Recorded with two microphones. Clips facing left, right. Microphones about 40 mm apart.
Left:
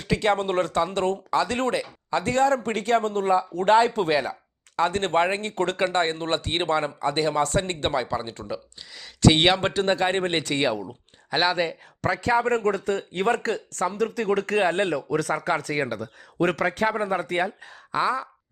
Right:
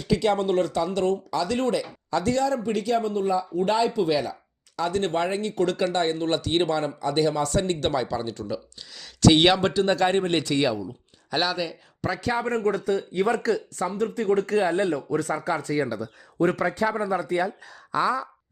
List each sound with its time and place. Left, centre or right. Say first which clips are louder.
0.0 s speech: even; left
1.8 s speech: even; left
4.1 s speech: left 1 dB; left
9.6 s speech: right 1 dB; left
11.5 s speech: left 4 dB; left
12.0 s speech: left 4 dB; left
13.7 s speech: left 1 dB; left
14.9 s speech: left 1 dB; left
16.4 s a man's voice: even; left
16.6 s speech: left 1 dB; left
17.7 s speech: even; left